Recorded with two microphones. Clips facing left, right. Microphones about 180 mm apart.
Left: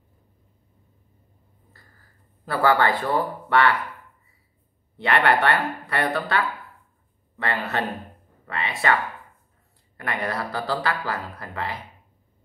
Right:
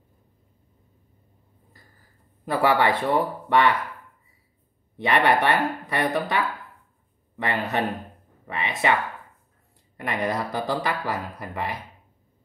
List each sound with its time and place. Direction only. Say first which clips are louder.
2.4 s speech: even; 20° right (ahead or behind)
4.9 s speech: even; 15° right (ahead or behind)
9.9 s speech: right 2 dB; 20° right (ahead or behind)